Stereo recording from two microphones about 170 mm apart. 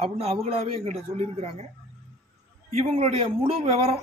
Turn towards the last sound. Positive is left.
turn(degrees=-35)  # may be behind; listen again after turning